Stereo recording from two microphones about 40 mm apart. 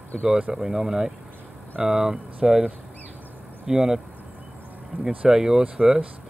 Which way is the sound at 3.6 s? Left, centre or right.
Centre.